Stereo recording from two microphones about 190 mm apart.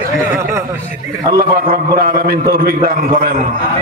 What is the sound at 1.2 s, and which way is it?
A man's voice, 50° right (ahead or behind).